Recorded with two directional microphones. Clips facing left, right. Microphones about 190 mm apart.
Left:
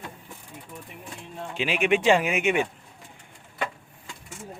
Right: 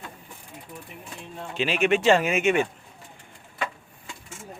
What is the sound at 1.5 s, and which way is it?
Speech, 10° left (ahead or behind).